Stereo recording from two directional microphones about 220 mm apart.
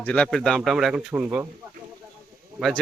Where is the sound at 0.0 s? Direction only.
5° left (ahead or behind).